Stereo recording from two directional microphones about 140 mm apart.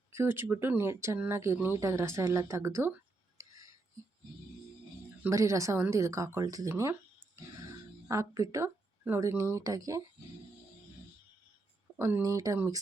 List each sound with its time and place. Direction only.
0.1 s speech: 20° right (ahead or behind)
3.4 s a sound: 20° right (ahead or behind)
5.3 s speech: 20° right (ahead or behind)
11.9 s speech: 20° right (ahead or behind)